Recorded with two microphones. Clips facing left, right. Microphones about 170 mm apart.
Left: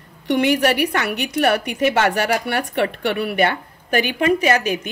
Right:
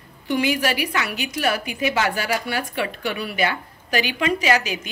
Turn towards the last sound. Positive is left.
turn(degrees=55)  # may be behind; listen again after turning